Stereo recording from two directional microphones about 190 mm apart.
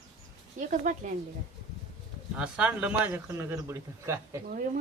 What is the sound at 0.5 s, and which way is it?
Speech, 40° right (ahead or behind).